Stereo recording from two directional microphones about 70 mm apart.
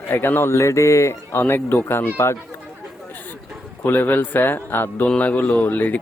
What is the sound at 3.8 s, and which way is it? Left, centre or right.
Speech, left.